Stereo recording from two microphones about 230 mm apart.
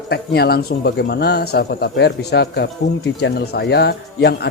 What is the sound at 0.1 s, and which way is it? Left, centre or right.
Speech, left.